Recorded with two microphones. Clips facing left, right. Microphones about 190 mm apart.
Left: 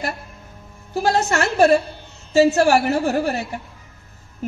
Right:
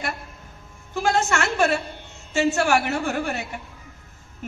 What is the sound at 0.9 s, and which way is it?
A man's voice, 35° left (ahead or behind).